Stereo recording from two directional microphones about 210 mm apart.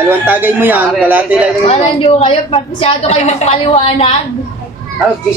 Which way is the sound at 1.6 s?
30° left (ahead or behind).